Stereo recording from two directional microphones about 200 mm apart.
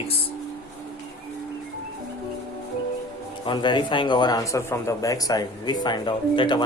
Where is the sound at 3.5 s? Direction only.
25° left (ahead or behind).